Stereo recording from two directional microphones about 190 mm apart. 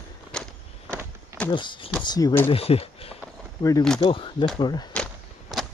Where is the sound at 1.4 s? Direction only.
25° left (ahead or behind).